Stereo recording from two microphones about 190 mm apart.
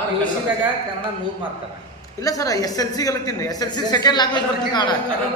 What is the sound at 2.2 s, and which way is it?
Speech, 20° left (ahead or behind).